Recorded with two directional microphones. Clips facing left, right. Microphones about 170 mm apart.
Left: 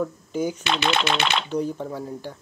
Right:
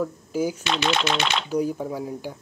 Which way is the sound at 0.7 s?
60° left (ahead or behind).